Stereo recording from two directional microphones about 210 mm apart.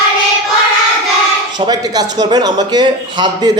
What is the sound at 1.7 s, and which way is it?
Music, 20° right (ahead or behind).